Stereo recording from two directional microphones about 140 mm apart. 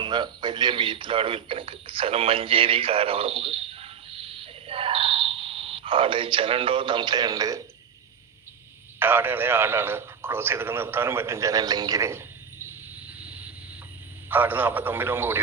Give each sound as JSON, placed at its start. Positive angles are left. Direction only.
{"t": 0.0, "sound": "a man's voice", "side_deg": -35}
{"t": 9.0, "sound": "a man's voice", "side_deg": -15}
{"t": 13.1, "sound": "vehicle", "side_deg": -10}
{"t": 14.3, "sound": "a man's voice", "side_deg": -15}